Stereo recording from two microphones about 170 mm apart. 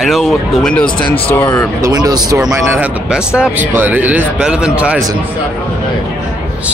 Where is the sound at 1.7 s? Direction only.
20° right (ahead or behind).